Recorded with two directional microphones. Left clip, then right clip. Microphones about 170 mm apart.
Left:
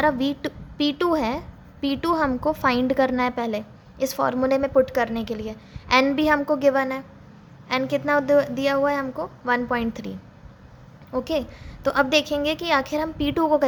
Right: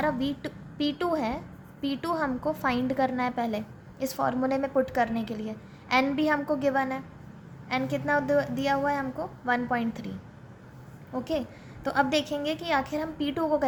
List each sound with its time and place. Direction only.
0.0 s a woman's voice: 35° left (ahead or behind)
11.1 s a woman's voice: 30° left (ahead or behind)